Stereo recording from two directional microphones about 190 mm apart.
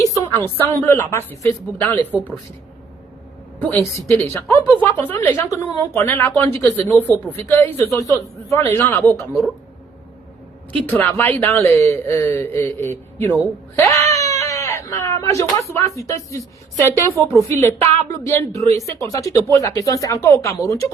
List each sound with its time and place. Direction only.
0.0 s a woman's voice: 15° left (ahead or behind)
2.1 s speech: 5° right (ahead or behind)
3.6 s a woman's voice: 10° left (ahead or behind)
10.8 s a woman's voice: 10° left (ahead or behind)
13.7 s wail: 15° left (ahead or behind)
14.4 s a sound: 15° left (ahead or behind)
15.7 s a woman's voice: 15° left (ahead or behind)